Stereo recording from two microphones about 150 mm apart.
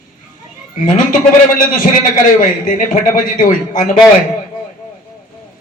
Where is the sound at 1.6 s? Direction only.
65° left (ahead or behind).